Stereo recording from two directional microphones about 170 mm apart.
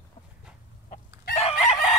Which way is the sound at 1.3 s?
35° left (ahead or behind).